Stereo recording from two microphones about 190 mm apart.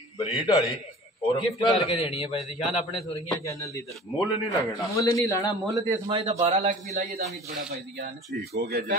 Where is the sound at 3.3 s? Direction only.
15° left (ahead or behind).